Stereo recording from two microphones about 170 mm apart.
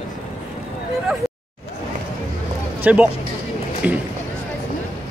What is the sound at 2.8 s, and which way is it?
Speech, 10° right (ahead or behind).